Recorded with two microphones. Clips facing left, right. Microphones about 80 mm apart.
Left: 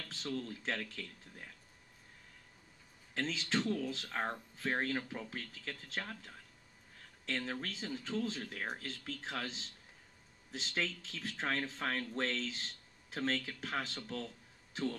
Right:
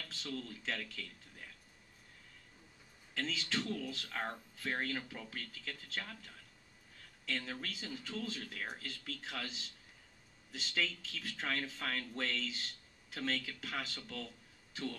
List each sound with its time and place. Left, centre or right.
0.1 s speech: left
3.2 s speech: left